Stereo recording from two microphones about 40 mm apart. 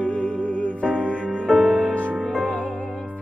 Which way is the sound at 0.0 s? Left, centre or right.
Left.